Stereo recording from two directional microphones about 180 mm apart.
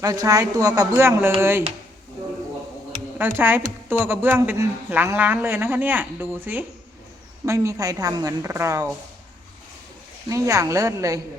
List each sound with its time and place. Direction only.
0.0 s a woman's voice: 20° right (ahead or behind)
3.2 s speech: 10° right (ahead or behind)
10.2 s speech: 15° right (ahead or behind)